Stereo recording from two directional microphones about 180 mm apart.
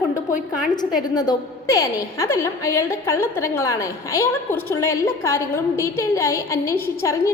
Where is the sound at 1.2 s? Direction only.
20° left (ahead or behind).